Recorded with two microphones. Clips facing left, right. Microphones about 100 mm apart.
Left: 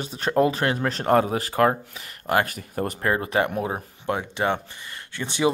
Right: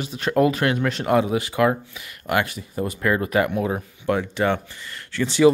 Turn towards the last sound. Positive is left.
turn(degrees=20)  # may be behind; listen again after turning